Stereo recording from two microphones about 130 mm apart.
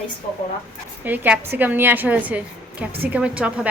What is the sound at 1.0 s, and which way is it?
A woman's voice, 15° right (ahead or behind).